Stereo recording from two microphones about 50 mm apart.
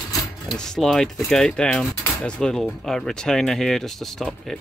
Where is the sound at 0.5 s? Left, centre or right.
Centre.